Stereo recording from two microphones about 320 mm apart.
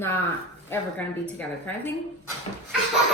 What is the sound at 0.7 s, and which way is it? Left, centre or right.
A woman's voice, centre.